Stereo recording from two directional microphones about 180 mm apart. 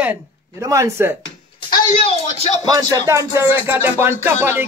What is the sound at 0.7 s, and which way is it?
Music, 15° right (ahead or behind).